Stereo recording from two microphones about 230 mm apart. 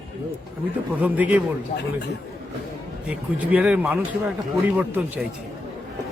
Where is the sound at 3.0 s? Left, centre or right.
Centre.